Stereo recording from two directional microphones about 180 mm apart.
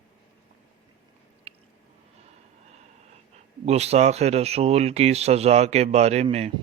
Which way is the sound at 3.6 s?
35° right (ahead or behind).